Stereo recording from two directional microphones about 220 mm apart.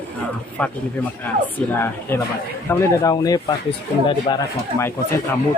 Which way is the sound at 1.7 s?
10° left (ahead or behind).